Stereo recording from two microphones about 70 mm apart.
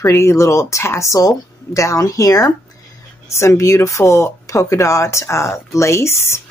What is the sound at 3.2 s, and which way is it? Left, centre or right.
Speech, left.